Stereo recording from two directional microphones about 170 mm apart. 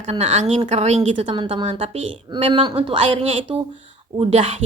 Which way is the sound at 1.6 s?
40° right (ahead or behind).